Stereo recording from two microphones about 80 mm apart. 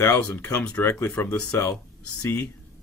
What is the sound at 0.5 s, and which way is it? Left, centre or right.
Speech, centre.